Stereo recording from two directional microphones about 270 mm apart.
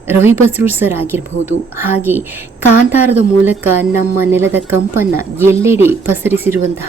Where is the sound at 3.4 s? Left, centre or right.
Centre.